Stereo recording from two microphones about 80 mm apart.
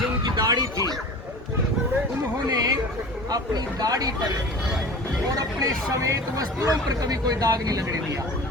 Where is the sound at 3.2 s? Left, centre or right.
Right.